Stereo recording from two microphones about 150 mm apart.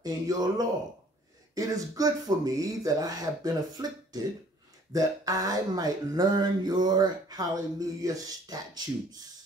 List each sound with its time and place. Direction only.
0.0 s speech: 25° right (ahead or behind)